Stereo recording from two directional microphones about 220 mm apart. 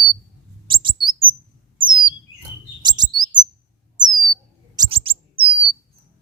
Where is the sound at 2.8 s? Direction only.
20° right (ahead or behind).